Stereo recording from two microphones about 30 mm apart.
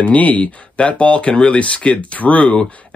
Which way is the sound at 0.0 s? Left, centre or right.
Left.